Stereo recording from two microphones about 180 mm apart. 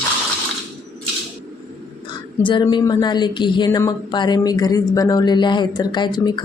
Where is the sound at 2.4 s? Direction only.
25° left (ahead or behind).